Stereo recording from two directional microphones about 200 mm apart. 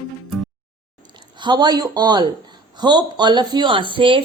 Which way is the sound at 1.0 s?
25° right (ahead or behind).